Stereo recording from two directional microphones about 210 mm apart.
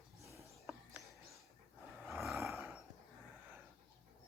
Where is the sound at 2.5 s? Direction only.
Centre (ahead or behind).